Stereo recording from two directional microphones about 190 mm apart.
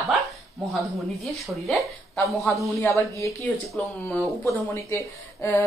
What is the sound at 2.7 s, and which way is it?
A woman's voice, 15° left (ahead or behind).